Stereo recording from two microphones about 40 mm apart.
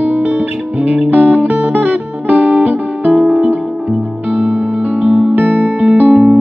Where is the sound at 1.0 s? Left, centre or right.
Right.